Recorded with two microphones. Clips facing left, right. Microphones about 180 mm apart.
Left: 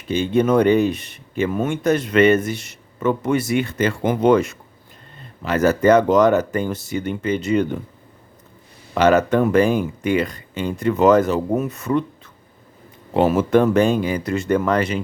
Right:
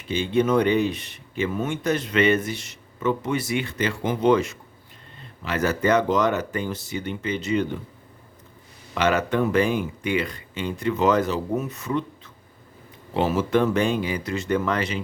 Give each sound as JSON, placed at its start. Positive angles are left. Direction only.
{"t": 0.1, "sound": "speech", "side_deg": 45}
{"t": 9.0, "sound": "speech", "side_deg": 40}